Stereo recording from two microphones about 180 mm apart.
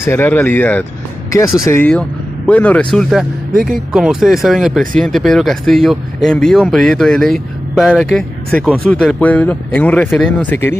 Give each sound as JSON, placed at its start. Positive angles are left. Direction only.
{"t": 0.0, "sound": "speech", "side_deg": 15}
{"t": 3.5, "sound": "speech", "side_deg": -50}
{"t": 3.9, "sound": "speech", "side_deg": -5}